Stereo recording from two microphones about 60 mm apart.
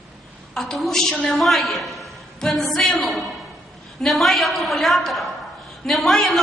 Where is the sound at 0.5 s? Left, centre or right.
Centre.